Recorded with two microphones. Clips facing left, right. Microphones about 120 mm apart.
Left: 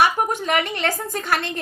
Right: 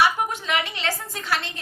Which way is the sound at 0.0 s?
45° left (ahead or behind).